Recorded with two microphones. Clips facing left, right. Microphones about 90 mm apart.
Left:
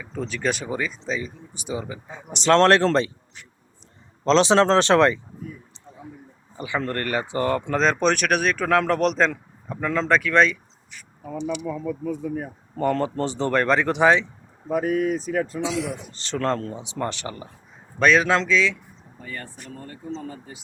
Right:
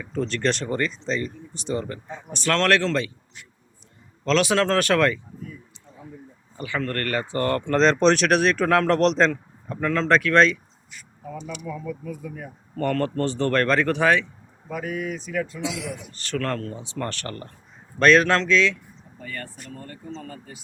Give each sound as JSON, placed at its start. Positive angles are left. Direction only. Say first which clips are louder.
{"t": 0.0, "sound": "speech", "louder": "right 2 dB", "side_deg": 5}
{"t": 2.4, "sound": "speech", "louder": "left 5 dB", "side_deg": 30}
{"t": 4.2, "sound": "speech", "louder": "left 4 dB", "side_deg": 25}
{"t": 6.6, "sound": "speech", "louder": "left 1 dB", "side_deg": 20}
{"t": 11.6, "sound": "speech", "louder": "left 4 dB", "side_deg": 30}
{"t": 12.7, "sound": "speech", "louder": "left 1 dB", "side_deg": 15}
{"t": 14.7, "sound": "speech", "louder": "left 7 dB", "side_deg": 40}
{"t": 16.1, "sound": "speech", "louder": "left 3 dB", "side_deg": 25}